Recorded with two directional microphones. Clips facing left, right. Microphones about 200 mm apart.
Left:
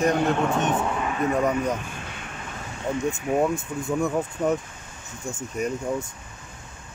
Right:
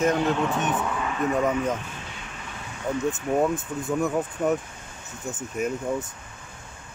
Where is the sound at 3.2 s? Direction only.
5° left (ahead or behind).